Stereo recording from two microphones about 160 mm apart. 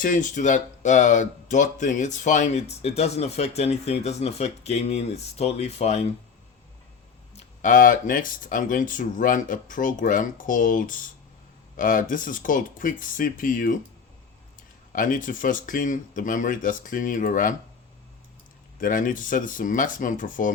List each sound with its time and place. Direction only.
0.0 s speech: 55° left (ahead or behind)
7.3 s speech: 55° left (ahead or behind)
14.9 s speech: 55° left (ahead or behind)
18.8 s speech: 55° left (ahead or behind)